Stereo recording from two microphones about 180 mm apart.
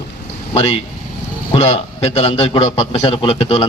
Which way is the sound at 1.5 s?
35° left (ahead or behind).